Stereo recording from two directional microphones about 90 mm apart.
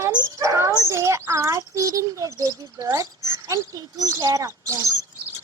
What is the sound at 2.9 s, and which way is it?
A child's voice, 40° right (ahead or behind).